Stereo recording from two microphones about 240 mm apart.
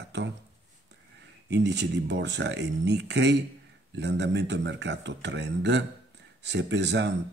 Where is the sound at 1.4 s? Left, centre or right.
Right.